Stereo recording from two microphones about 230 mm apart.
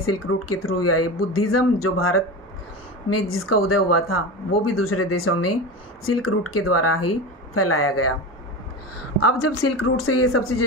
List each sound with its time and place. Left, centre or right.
0.0 s a woman's voice: left
9.2 s speech: left